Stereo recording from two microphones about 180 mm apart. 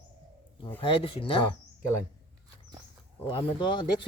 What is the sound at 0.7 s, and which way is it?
Speech, 30° left (ahead or behind).